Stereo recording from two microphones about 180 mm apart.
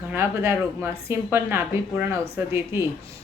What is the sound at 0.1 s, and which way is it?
A woman's voice, 10° right (ahead or behind).